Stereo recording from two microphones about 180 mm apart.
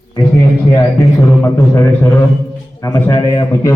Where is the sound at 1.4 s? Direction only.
15° left (ahead or behind).